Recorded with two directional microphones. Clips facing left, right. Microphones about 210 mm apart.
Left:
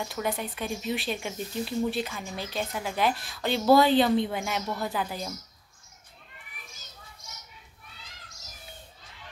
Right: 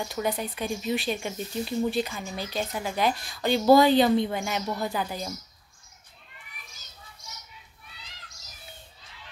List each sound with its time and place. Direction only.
0.1 s speech: centre (ahead or behind)